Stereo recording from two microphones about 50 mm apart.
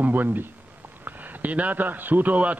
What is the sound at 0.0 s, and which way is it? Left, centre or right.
A man's voice, right.